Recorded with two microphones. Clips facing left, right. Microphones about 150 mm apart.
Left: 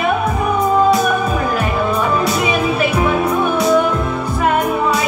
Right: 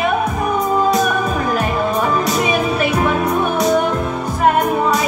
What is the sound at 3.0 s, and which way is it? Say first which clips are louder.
Music: left 1 dB; 40° right (ahead or behind).